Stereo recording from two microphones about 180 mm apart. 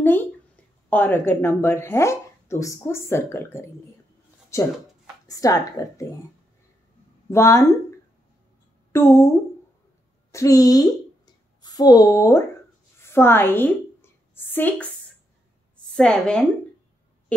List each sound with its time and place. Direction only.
0.0 s speech: 10° left (ahead or behind)
7.2 s speech: 15° left (ahead or behind)
8.9 s speech: 15° left (ahead or behind)
10.3 s a woman's voice: 20° left (ahead or behind)
13.0 s a sound: 15° left (ahead or behind)
15.9 s a woman's voice: 5° left (ahead or behind)